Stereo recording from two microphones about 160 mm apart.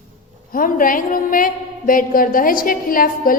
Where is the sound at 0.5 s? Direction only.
60° left (ahead or behind).